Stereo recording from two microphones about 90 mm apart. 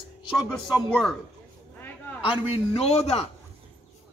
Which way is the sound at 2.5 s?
90° left.